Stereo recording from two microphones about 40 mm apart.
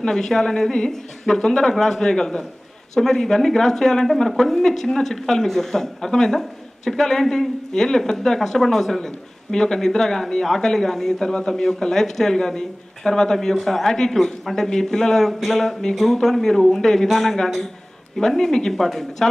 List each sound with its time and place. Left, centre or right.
0.0 s speech: centre